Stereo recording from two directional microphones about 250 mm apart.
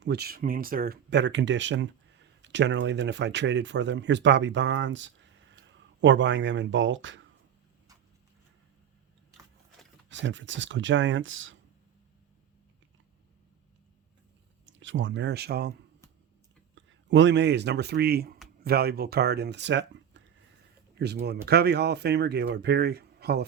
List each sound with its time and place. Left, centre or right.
0.0 s speech: right
10.1 s speech: right
14.7 s speech: right
16.7 s speech: right